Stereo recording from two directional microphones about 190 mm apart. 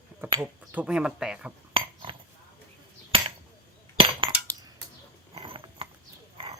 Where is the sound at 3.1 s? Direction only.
30° right (ahead or behind).